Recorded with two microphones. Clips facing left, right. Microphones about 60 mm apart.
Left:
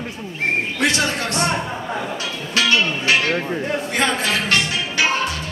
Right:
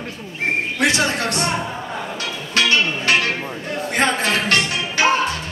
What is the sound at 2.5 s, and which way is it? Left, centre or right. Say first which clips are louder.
Music: even; right.